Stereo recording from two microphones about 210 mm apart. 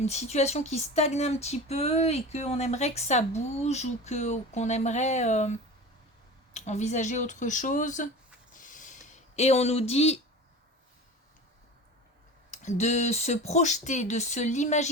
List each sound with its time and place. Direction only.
0.0 s speech: 30° left (ahead or behind)
8.5 s a sound: 40° left (ahead or behind)
12.5 s speech: 35° left (ahead or behind)